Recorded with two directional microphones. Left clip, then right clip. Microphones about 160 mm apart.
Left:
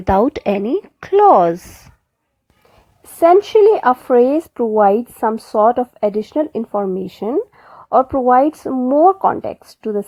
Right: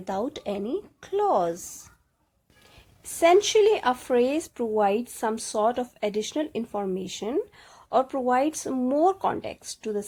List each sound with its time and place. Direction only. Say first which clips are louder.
0.0 s speech: left 15 dB; 50° left (ahead or behind)
3.6 s speech: left 10 dB; 40° left (ahead or behind)
6.9 s speech: left 9 dB; 40° left (ahead or behind)
7.3 s a sound: left 9 dB; 25° left (ahead or behind)
7.9 s speech: left 11 dB; 35° left (ahead or behind)
8.6 s speech: left 10 dB; 20° left (ahead or behind)
9.2 s speech: left 11 dB; 30° left (ahead or behind)